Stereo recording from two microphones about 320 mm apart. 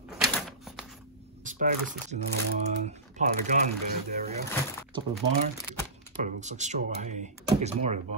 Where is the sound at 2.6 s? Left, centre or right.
Right.